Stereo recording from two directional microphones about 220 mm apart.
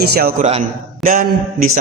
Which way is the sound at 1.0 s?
40° right (ahead or behind).